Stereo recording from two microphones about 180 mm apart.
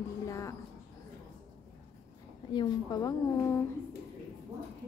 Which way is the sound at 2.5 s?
25° left (ahead or behind).